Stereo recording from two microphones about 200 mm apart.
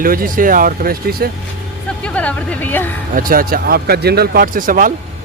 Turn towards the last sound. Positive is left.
turn(degrees=-45)  # may be behind; listen again after turning